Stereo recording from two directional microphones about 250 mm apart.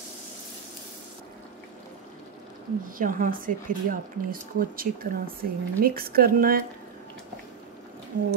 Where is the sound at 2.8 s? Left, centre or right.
Right.